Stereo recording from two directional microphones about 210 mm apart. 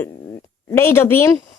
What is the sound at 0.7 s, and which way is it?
Speech, 10° left (ahead or behind).